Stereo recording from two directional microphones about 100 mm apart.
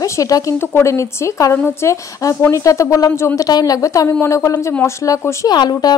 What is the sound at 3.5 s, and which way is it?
A woman's voice, 40° left (ahead or behind).